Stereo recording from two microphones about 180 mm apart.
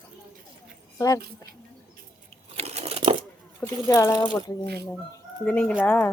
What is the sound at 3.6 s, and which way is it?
Speech, 15° left (ahead or behind).